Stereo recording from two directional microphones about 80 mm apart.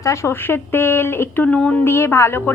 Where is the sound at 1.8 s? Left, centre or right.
Left.